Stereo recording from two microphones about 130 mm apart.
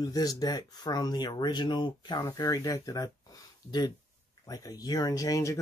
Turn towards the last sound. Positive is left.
turn(degrees=25)  # may be behind; listen again after turning